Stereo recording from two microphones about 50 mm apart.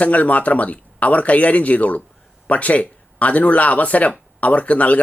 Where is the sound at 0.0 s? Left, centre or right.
Left.